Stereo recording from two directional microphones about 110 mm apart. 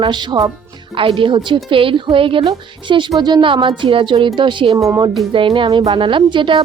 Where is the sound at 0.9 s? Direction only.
50° right (ahead or behind).